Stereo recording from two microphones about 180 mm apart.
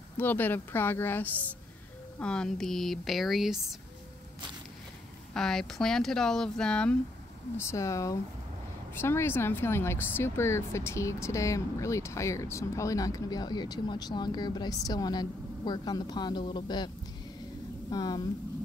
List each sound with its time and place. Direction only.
0.2 s speech: 10° left (ahead or behind)
5.3 s a woman's voice: 5° left (ahead or behind); by 18.2 s 20° left (ahead or behind)